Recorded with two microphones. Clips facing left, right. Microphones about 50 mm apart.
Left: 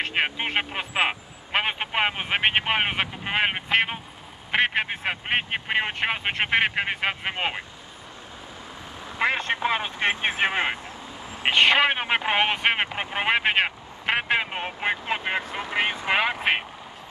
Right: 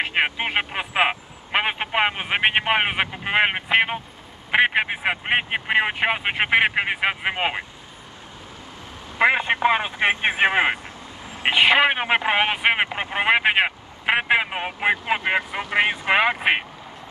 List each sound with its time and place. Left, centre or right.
0.0 s speech: centre
9.2 s speech: centre
11.4 s speech: centre